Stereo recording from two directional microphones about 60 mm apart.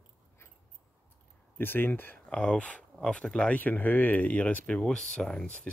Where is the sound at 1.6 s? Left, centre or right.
Left.